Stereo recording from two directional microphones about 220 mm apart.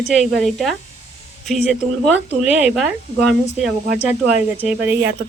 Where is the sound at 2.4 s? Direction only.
5° right (ahead or behind).